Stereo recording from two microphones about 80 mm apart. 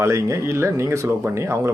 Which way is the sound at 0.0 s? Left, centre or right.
Right.